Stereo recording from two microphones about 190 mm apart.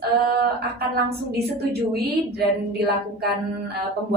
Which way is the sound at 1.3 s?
55° right (ahead or behind).